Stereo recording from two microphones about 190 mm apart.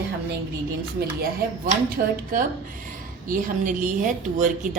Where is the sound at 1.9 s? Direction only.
45° right (ahead or behind).